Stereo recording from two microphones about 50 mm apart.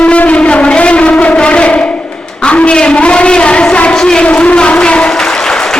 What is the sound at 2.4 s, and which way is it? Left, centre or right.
A woman's voice, left.